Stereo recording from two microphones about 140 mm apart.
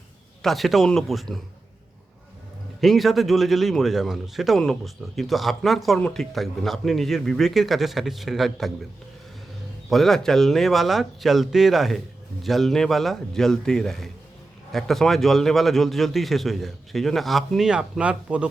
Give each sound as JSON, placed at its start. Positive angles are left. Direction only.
{"t": 0.4, "sound": "speech", "side_deg": 0}
{"t": 2.8, "sound": "speech", "side_deg": 0}
{"t": 9.9, "sound": "speech", "side_deg": 0}